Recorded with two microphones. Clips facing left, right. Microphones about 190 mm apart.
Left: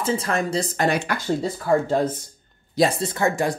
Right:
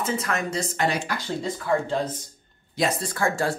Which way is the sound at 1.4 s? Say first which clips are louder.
Left 2 dB; 40° left (ahead or behind).